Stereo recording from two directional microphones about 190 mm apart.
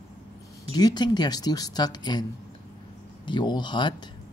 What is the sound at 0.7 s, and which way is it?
Speech, 20° left (ahead or behind).